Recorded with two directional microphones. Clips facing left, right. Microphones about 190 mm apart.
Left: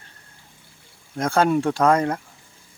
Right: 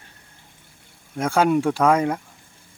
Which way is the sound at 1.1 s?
10° right (ahead or behind).